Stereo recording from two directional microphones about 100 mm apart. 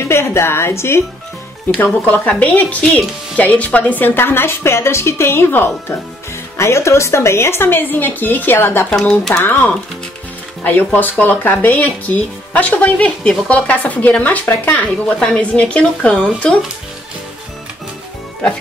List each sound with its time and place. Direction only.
0.1 s speech: 25° left (ahead or behind)
8.9 s speech: 5° left (ahead or behind)
9.4 s speech: 20° left (ahead or behind)